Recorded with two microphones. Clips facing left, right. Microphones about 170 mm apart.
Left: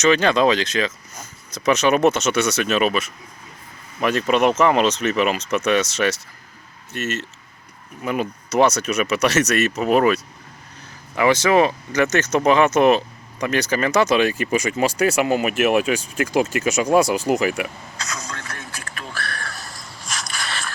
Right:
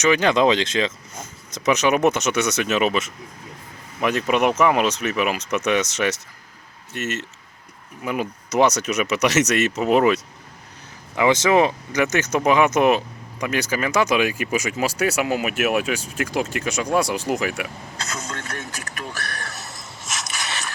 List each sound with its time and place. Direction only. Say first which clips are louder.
0.0 s speech: left 1 dB; 15° right (ahead or behind)
17.9 s vehicle: right 1 dB; 30° right (ahead or behind)
18.9 s a sound: even; 20° right (ahead or behind)